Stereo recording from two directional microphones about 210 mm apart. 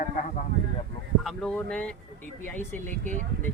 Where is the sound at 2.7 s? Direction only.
35° right (ahead or behind).